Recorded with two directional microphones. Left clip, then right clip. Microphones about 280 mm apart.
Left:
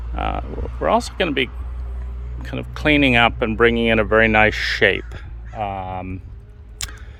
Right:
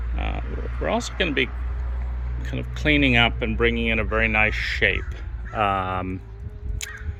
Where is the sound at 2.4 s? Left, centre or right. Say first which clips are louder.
Left 4 dB; centre.